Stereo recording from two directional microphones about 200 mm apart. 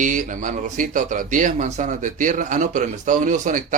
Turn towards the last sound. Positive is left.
turn(degrees=-40)  # may be behind; listen again after turning